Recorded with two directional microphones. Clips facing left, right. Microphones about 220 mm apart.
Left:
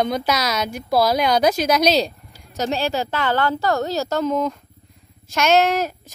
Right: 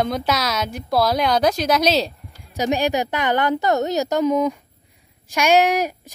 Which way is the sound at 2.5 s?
15° right (ahead or behind).